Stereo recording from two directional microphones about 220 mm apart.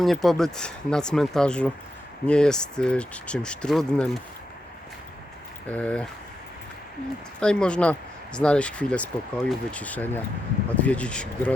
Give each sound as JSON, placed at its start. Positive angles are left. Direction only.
{"t": 0.0, "sound": "speech", "side_deg": 0}
{"t": 5.7, "sound": "speech", "side_deg": 5}
{"t": 7.3, "sound": "speech", "side_deg": 5}